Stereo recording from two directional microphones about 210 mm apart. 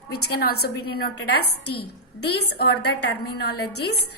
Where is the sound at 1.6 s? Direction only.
90° left.